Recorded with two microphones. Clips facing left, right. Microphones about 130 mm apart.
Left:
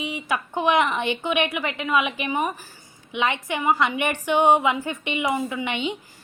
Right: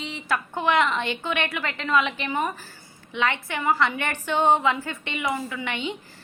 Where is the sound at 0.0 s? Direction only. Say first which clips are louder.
Left 1 dB; 15° left (ahead or behind).